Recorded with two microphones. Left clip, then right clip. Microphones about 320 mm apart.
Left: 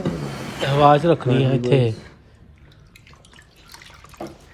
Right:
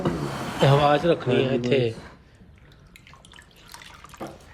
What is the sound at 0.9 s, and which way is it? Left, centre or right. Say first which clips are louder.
A man's voice: left 5 dB; centre.